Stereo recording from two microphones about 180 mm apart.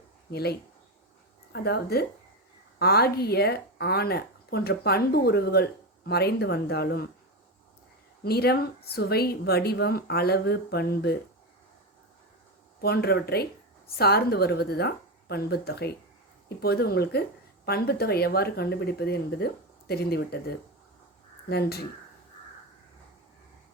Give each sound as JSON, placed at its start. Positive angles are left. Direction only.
{"t": 0.3, "sound": "speech", "side_deg": 65}
{"t": 1.5, "sound": "a woman's voice", "side_deg": 65}
{"t": 8.2, "sound": "a woman's voice", "side_deg": 60}
{"t": 12.8, "sound": "a woman's voice", "side_deg": 60}
{"t": 21.5, "sound": "a woman's voice", "side_deg": 60}